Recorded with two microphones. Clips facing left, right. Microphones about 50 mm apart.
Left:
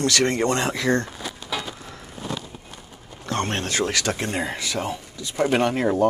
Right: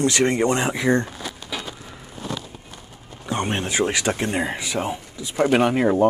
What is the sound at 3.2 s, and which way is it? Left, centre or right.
Speech, centre.